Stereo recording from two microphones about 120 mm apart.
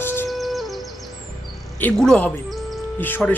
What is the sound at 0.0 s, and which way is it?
Music, 15° left (ahead or behind).